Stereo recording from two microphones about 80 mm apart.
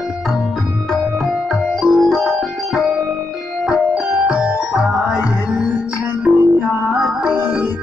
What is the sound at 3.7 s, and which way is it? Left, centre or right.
Music, centre.